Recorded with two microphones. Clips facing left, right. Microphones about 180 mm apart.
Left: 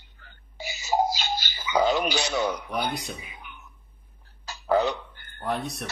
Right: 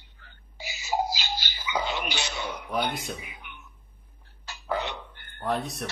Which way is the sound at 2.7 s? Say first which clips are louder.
Even; centre (ahead or behind).